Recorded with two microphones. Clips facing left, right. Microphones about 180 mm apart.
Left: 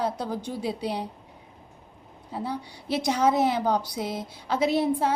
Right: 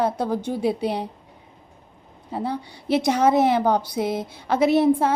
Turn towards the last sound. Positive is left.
turn(degrees=-55)  # may be behind; listen again after turning